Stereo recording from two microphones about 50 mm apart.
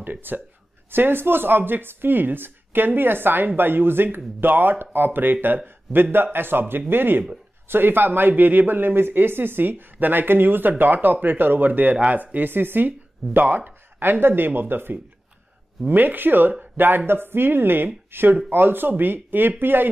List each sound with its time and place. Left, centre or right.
0.0 s speech: right
5.9 s speech: centre
6.3 s speech: right